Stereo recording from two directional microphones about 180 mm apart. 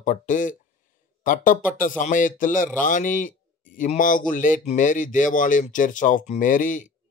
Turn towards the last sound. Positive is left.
turn(degrees=45)  # may be behind; listen again after turning